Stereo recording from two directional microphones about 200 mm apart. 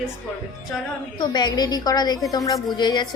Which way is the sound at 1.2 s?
20° left (ahead or behind).